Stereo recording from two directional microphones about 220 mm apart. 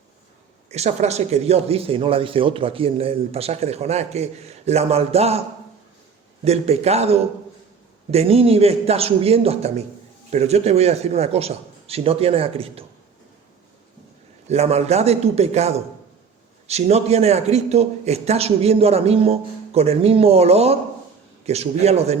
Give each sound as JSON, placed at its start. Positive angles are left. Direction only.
{"t": 0.7, "sound": "speech", "side_deg": -30}
{"t": 6.4, "sound": "speech", "side_deg": -30}
{"t": 14.4, "sound": "speech", "side_deg": -30}